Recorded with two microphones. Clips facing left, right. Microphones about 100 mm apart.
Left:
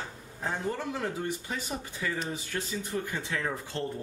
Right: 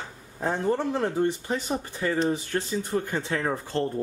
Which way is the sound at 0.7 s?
30° right (ahead or behind).